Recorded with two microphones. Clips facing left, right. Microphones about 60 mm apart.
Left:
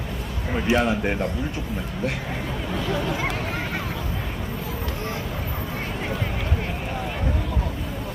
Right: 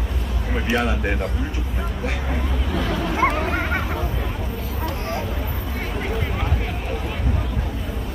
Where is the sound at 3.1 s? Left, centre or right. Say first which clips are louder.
Right 6 dB; right.